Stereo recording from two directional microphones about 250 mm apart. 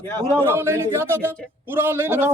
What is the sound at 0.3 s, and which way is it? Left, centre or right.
A man's voice, centre.